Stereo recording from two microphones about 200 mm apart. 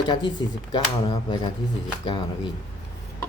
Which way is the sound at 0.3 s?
20° left (ahead or behind).